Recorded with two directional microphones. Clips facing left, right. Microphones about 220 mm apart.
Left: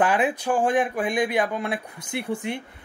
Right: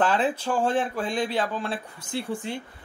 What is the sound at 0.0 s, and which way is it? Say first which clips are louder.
Speech: left 2 dB; 15° left (ahead or behind).